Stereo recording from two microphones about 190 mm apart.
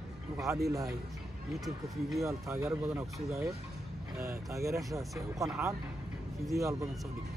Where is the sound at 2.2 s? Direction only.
15° right (ahead or behind).